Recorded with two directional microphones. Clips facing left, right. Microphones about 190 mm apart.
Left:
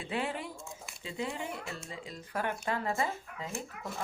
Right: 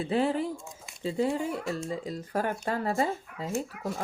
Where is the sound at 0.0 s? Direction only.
40° right (ahead or behind).